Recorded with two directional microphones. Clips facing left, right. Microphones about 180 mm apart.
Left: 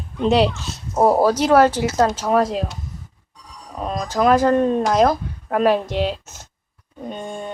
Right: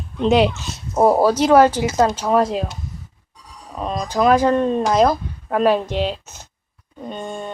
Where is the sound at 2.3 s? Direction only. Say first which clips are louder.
Right 1 dB; centre (ahead or behind).